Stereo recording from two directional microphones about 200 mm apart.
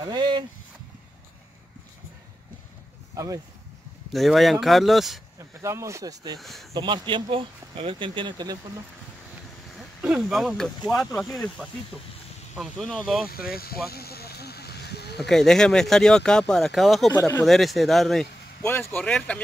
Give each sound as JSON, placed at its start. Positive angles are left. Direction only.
{"t": 0.0, "sound": "speech", "side_deg": -20}
{"t": 4.1, "sound": "speech", "side_deg": 0}
{"t": 5.6, "sound": "speech", "side_deg": -15}
{"t": 6.4, "sound": "speech", "side_deg": 0}
{"t": 6.7, "sound": "speech", "side_deg": -20}
{"t": 10.0, "sound": "speech", "side_deg": 0}
{"t": 13.5, "sound": "speech", "side_deg": 50}
{"t": 13.8, "sound": "a sound", "side_deg": 50}
{"t": 15.1, "sound": "speech", "side_deg": 0}
{"t": 17.1, "sound": "speech", "side_deg": 15}
{"t": 17.5, "sound": "speech", "side_deg": 0}